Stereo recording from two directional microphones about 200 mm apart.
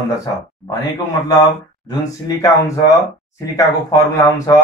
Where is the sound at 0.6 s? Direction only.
20° left (ahead or behind).